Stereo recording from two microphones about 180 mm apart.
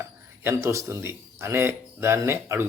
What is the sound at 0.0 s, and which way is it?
Speech, 15° right (ahead or behind).